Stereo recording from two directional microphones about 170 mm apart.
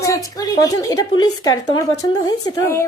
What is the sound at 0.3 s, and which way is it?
A woman's voice, 20° left (ahead or behind).